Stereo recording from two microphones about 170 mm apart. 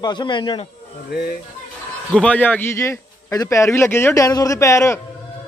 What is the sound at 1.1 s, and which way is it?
Speech, 65° left (ahead or behind).